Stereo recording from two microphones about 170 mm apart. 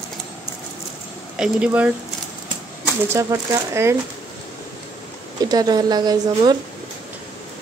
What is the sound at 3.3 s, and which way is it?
Speech, 15° right (ahead or behind).